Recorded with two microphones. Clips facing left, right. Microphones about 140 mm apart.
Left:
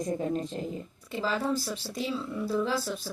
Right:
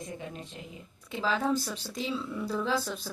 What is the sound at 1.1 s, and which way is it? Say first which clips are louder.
Speech: right 1 dB; 5° left (ahead or behind).